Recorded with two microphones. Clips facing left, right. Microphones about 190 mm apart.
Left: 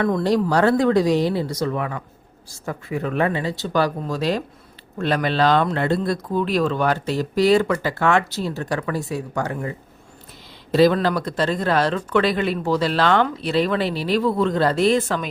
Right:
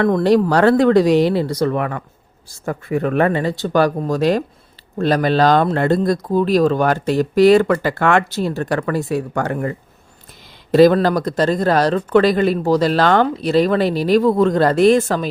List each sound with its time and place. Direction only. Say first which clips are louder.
0.0 s speech: right 5 dB; 65° right (ahead or behind); by 4.4 s 50° right (ahead or behind)
4.9 s speech: right 5 dB; 40° right (ahead or behind); by 9.7 s 60° right (ahead or behind)
10.7 s speech: right 5 dB; 50° right (ahead or behind)